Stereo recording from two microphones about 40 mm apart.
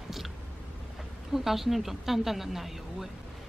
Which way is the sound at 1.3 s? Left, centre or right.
Centre.